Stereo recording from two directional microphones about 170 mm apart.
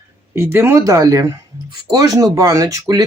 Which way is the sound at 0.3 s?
15° right (ahead or behind).